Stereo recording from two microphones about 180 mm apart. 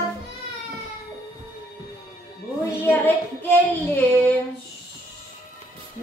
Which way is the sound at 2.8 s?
10° left (ahead or behind).